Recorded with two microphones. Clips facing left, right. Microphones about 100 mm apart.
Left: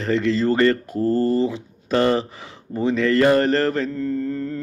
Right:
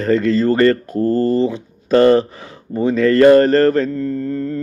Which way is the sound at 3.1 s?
50° right (ahead or behind).